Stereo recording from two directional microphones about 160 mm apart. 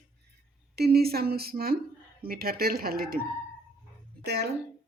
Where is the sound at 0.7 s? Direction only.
75° right (ahead or behind).